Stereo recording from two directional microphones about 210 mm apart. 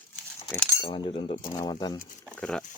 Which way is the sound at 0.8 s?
20° left (ahead or behind).